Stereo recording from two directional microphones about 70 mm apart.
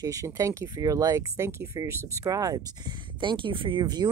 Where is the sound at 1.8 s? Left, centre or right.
Right.